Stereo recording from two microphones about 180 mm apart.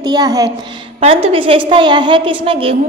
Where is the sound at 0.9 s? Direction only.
35° right (ahead or behind).